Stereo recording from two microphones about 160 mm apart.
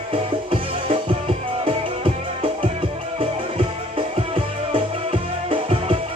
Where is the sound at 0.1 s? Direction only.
35° right (ahead or behind).